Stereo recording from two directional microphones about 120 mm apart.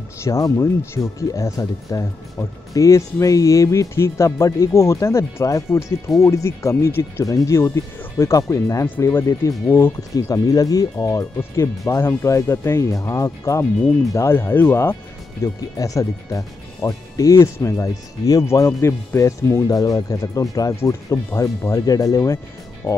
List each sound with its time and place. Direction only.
0.2 s speech: 25° left (ahead or behind)